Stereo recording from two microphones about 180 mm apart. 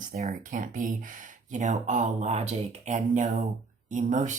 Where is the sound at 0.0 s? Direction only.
45° right (ahead or behind).